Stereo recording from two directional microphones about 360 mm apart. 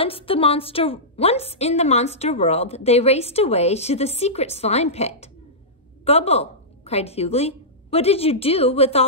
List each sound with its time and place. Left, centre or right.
0.0 s a woman's voice: centre